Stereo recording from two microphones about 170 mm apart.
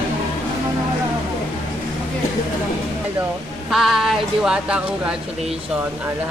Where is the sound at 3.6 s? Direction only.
Centre (ahead or behind).